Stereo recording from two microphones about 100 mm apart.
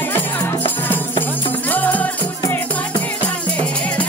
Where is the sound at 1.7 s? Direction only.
15° left (ahead or behind).